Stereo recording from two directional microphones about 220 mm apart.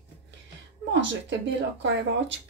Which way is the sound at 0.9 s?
55° right (ahead or behind).